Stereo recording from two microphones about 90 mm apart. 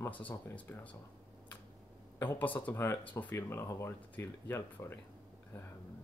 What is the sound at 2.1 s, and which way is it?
Speech, 20° left (ahead or behind).